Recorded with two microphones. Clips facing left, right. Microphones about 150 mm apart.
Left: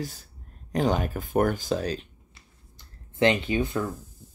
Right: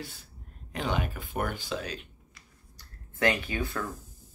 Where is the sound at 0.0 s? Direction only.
40° left (ahead or behind); by 3.8 s 20° left (ahead or behind).